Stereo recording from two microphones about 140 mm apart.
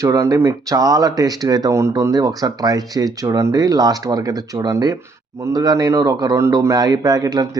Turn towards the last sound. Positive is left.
turn(degrees=-30)  # may be behind; listen again after turning